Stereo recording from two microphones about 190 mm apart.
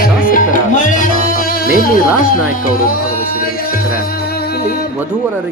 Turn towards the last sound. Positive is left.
turn(degrees=-10)  # may be behind; listen again after turning